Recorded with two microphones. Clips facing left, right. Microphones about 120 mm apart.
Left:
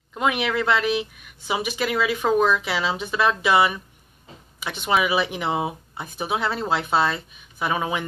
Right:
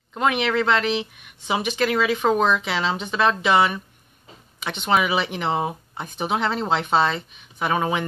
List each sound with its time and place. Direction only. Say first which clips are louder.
0.2 s speech: right 2 dB; 10° left (ahead or behind)
2.2 s speech: left 1 dB; 20° right (ahead or behind)
2.6 s speech: right 1 dB; 10° left (ahead or behind)
4.8 s speech: even; 5° left (ahead or behind)